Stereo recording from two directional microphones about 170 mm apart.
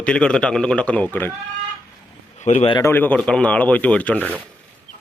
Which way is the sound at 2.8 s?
15° left (ahead or behind).